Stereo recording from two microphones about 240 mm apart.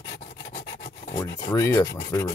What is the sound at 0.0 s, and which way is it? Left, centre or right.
Rub, left.